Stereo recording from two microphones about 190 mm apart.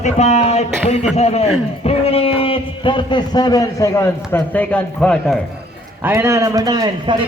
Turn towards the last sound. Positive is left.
turn(degrees=-20)  # may be behind; listen again after turning